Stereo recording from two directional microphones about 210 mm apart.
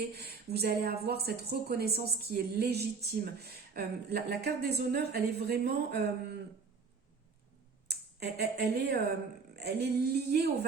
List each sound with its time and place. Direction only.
0.1 s speech: 50° right (ahead or behind)
7.9 s speech: 50° right (ahead or behind)